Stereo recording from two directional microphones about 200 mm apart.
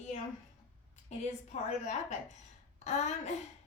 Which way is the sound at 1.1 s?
35° left (ahead or behind).